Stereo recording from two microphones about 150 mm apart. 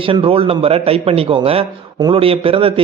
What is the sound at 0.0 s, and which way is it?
A man's voice, 35° right (ahead or behind).